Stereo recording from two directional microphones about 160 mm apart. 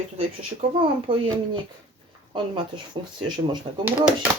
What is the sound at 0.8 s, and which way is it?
Speech, 35° right (ahead or behind).